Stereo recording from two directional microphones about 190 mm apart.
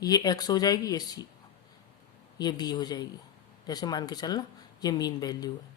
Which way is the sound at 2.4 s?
20° left (ahead or behind).